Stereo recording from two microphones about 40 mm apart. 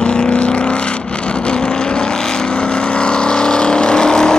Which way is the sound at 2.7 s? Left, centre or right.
Left.